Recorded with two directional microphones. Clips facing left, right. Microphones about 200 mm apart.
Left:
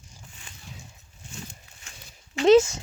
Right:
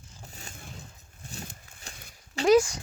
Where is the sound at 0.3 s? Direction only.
40° right (ahead or behind).